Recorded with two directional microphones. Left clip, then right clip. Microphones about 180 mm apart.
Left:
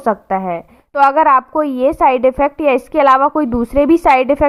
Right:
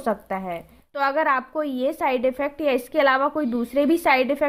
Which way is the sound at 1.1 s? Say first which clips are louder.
Left 9 dB; 40° left (ahead or behind).